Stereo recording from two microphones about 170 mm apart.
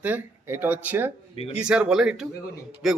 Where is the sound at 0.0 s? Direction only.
10° right (ahead or behind).